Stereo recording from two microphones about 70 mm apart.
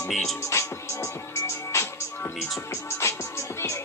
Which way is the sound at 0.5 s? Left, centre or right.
Left.